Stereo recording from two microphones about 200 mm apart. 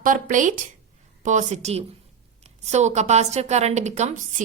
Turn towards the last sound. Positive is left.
turn(degrees=-35)  # may be behind; listen again after turning